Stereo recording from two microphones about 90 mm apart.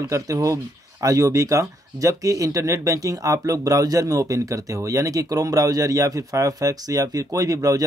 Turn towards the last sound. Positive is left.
turn(degrees=-40)  # may be behind; listen again after turning